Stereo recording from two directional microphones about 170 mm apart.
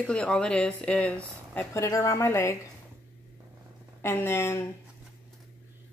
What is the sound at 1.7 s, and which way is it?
Speech, 15° left (ahead or behind).